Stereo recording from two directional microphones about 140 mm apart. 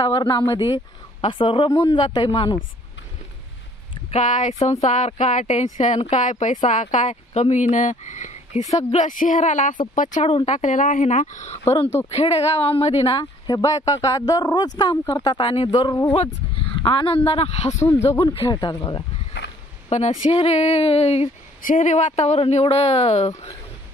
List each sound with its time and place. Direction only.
0.0 s speech: 35° left (ahead or behind)
1.7 s speech: 25° left (ahead or behind)
2.0 s speech: 35° left (ahead or behind)
4.1 s speech: 60° left (ahead or behind)
10.1 s speech: 50° left (ahead or behind)
11.6 s speech: 15° left (ahead or behind)
12.1 s speech: 45° left (ahead or behind)
13.1 s speech: 30° left (ahead or behind)
15.3 s speech: 40° left (ahead or behind)
17.8 s speech: 15° left (ahead or behind)
18.3 s speech: 35° left (ahead or behind)
19.9 s speech: 55° left (ahead or behind)
21.6 s speech: 60° left (ahead or behind)